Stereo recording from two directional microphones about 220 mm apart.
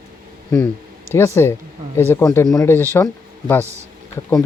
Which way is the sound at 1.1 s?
10° left (ahead or behind).